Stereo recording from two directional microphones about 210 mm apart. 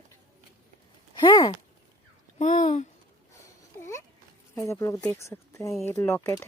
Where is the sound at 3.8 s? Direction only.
10° left (ahead or behind).